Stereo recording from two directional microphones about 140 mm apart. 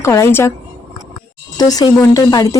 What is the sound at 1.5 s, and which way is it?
Speech, 25° left (ahead or behind).